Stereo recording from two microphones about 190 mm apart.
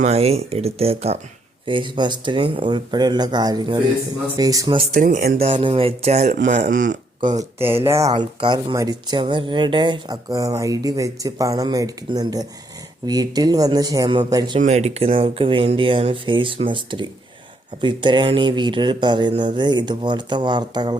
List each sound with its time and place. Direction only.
0.0 s speech: 35° right (ahead or behind)
4.9 s speech: 45° right (ahead or behind)
5.4 s speech: 25° right (ahead or behind)
7.3 s speech: 10° right (ahead or behind)
8.1 s speech: 25° right (ahead or behind)
14.6 s speech: 35° right (ahead or behind)